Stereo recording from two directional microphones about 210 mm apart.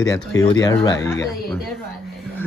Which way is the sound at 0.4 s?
15° left (ahead or behind).